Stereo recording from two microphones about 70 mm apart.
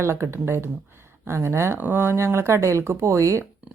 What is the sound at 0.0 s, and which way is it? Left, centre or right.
Speech, right.